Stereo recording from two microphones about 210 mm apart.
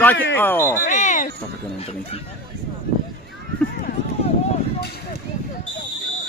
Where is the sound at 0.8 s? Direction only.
35° left (ahead or behind).